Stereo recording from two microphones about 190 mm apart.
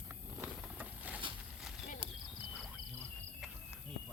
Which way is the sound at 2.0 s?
25° right (ahead or behind).